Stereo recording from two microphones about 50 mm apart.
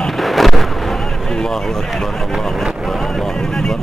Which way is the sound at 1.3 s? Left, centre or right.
Centre.